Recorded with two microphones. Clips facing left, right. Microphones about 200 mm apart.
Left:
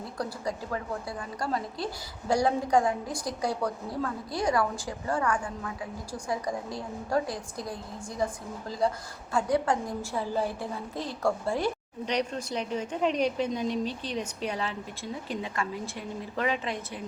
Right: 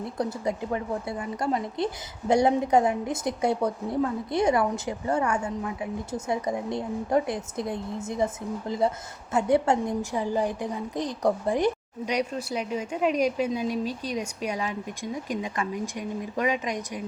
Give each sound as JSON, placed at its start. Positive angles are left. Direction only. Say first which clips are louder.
{"t": 0.2, "sound": "a woman's voice", "louder": "right 5 dB", "side_deg": -20}